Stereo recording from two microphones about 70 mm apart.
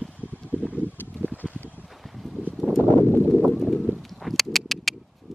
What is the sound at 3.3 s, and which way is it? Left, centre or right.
Clip-clop, centre.